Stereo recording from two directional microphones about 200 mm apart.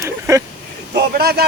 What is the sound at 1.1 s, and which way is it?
Speech, 50° right (ahead or behind).